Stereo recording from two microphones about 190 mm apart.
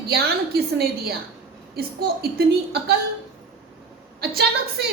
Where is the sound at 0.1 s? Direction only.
55° right (ahead or behind).